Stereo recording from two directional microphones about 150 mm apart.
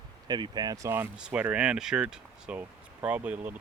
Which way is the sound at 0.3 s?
30° right (ahead or behind).